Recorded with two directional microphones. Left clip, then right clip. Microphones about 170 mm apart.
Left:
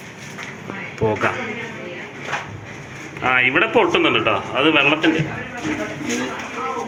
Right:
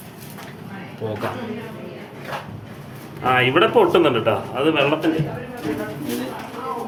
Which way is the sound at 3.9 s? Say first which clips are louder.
Even; 25° right (ahead or behind).